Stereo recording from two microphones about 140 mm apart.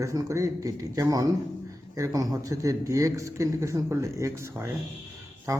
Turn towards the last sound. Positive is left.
turn(degrees=-25)  # may be behind; listen again after turning